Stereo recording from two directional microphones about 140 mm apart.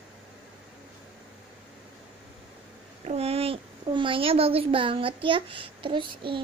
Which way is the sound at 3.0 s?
45° right (ahead or behind).